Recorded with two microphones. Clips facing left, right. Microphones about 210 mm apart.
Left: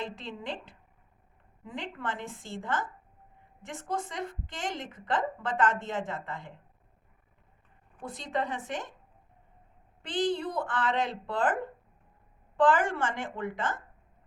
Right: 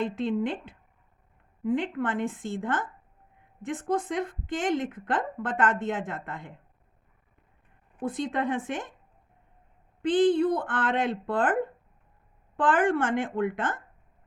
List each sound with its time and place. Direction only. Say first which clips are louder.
0.0 s a woman's voice: right 11 dB; 55° right (ahead or behind)
8.0 s a woman's voice: right 5 dB; 55° right (ahead or behind)
10.1 s a woman's voice: right 8 dB; 50° right (ahead or behind)
12.5 s a woman's voice: right 1 dB; 55° right (ahead or behind)